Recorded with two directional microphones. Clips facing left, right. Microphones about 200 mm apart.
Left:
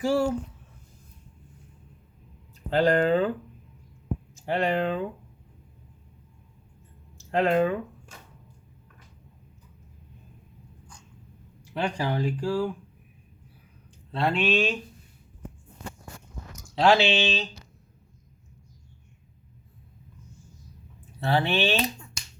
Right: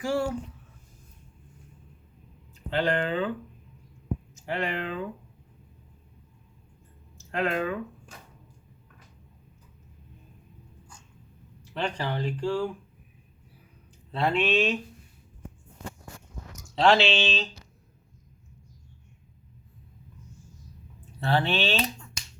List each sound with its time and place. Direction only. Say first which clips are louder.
0.0 s speech: left 4 dB; 25° left (ahead or behind)
2.6 s speech: left 5 dB; 40° left (ahead or behind)
4.4 s speech: left 6 dB; 35° left (ahead or behind)
7.3 s speech: left 6 dB; 30° left (ahead or behind)
11.6 s speech: left 2 dB; 10° left (ahead or behind)
14.1 s speech: even; centre (ahead or behind)
16.7 s speech: left 1 dB; 5° left (ahead or behind)
21.2 s speech: left 1 dB; 10° left (ahead or behind)